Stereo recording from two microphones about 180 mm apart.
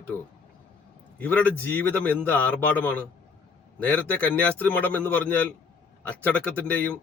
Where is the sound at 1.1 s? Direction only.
10° left (ahead or behind).